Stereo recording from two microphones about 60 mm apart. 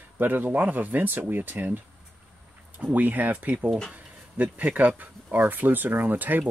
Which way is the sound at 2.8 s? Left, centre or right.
Right.